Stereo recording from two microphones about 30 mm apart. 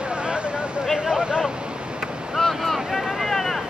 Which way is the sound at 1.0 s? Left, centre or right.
Right.